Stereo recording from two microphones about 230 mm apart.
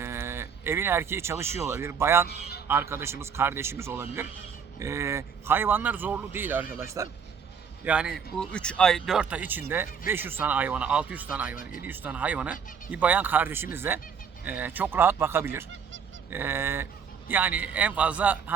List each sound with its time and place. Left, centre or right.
0.0 s speech: centre
2.2 s a man's voice: left
2.6 s a man's voice: centre
8.4 s a man's voice: centre